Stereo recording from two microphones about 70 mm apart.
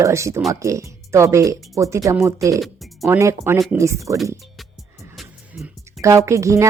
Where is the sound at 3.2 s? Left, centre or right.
Right.